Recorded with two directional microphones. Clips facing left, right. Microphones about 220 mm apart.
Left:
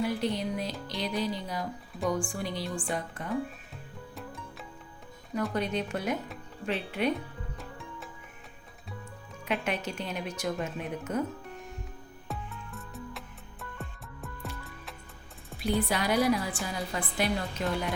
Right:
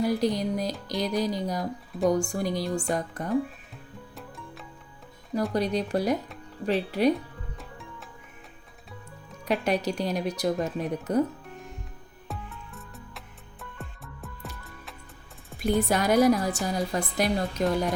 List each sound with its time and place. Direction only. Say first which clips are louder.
0.0 s a woman's voice: right 5 dB; 40° right (ahead or behind)
4.1 s music: left 1 dB; centre (ahead or behind)
5.5 s speech: right 8 dB; 35° right (ahead or behind)
7.6 s music: left 1 dB; centre (ahead or behind)
9.5 s speech: right 6 dB; 40° right (ahead or behind)
11.4 s music: even; centre (ahead or behind)
15.8 s a woman's voice: right 7 dB; 45° right (ahead or behind)